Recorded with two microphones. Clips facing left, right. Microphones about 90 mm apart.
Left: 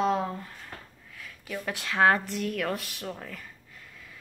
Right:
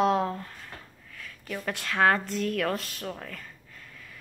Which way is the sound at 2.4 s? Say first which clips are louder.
Right 2 dB; 5° left (ahead or behind).